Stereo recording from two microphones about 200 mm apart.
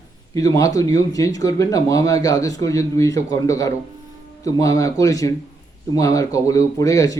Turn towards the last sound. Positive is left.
turn(degrees=15)  # may be behind; listen again after turning